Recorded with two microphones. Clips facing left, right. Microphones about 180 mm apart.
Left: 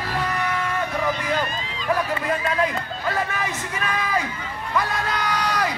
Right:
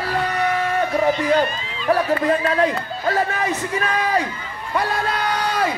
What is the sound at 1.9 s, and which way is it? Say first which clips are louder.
Speech: right 6 dB; 35° right (ahead or behind).